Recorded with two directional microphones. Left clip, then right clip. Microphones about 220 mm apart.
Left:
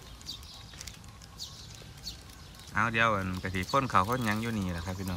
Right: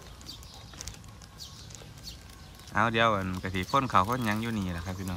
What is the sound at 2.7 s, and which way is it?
Speech, 5° right (ahead or behind).